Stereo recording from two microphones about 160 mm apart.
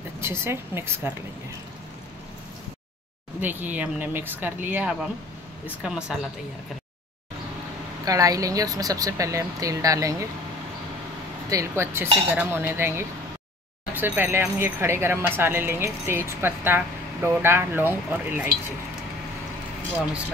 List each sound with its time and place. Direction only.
0.2 s speech: 15° right (ahead or behind)
3.3 s a woman's voice: 10° right (ahead or behind)
8.0 s speech: 20° right (ahead or behind)
11.5 s speech: 15° right (ahead or behind)